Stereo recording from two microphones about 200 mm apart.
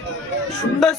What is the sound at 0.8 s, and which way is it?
Speech, centre (ahead or behind).